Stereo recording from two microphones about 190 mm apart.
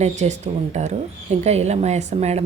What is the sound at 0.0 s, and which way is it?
A woman's voice, 35° right (ahead or behind).